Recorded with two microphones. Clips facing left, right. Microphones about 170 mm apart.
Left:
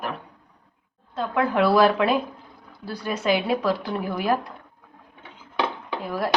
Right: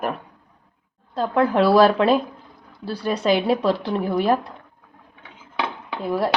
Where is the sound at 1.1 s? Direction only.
35° right (ahead or behind).